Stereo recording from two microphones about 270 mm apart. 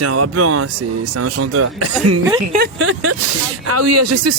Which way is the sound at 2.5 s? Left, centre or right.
Right.